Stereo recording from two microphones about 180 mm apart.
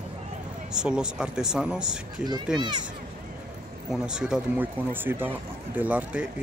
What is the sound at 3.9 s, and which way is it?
Speech, 5° right (ahead or behind).